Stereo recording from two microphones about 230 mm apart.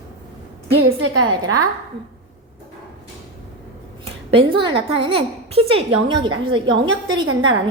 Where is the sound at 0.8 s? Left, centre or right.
Right.